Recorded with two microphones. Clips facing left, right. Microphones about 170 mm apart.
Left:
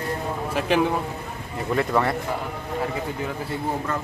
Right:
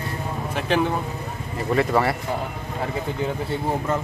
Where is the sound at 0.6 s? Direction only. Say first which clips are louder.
Left 1 dB; 5° left (ahead or behind).